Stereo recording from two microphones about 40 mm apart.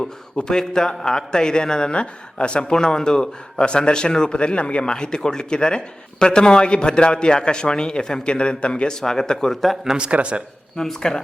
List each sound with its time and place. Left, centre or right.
0.3 s speech: centre
9.0 s speech: centre
10.0 s speech: right
10.8 s speech: centre